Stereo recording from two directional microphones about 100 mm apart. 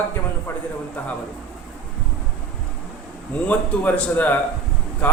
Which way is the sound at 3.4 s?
15° left (ahead or behind).